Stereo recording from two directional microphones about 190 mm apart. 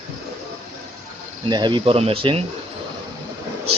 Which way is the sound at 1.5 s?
20° right (ahead or behind).